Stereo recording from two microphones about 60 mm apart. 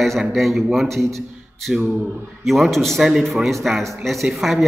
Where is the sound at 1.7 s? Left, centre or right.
Centre.